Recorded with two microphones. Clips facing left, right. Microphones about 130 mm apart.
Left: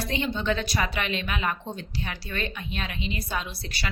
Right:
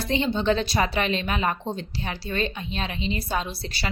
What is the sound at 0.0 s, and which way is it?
A woman's voice, 30° right (ahead or behind).